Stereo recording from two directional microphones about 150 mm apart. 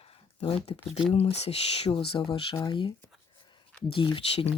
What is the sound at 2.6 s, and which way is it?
Speech, 30° left (ahead or behind).